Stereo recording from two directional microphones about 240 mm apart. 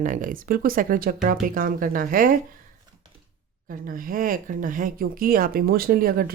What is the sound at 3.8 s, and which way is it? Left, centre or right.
Speech, right.